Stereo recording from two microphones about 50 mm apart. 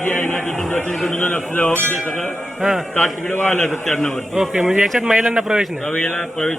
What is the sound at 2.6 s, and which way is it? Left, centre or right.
Speech, centre.